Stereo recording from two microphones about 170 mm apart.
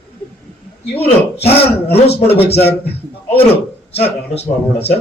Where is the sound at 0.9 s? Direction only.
35° left (ahead or behind).